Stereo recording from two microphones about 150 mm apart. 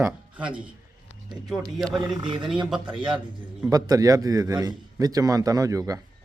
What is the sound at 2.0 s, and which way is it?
Speech, 30° right (ahead or behind).